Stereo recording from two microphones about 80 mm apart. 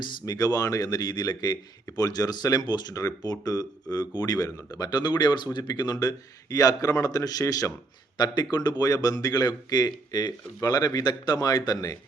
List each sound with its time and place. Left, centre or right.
0.2 s a man's voice: left
2.9 s a man's voice: left
4.4 s a man's voice: left
8.2 s a man's voice: left